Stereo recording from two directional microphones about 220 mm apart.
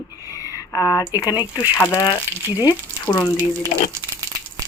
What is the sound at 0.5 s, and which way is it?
Speech, 15° left (ahead or behind).